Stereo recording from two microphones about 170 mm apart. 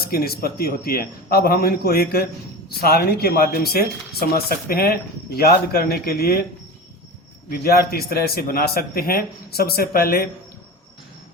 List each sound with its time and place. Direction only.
0.0 s a man's voice: 65° left (ahead or behind)
7.6 s a man's voice: 65° left (ahead or behind)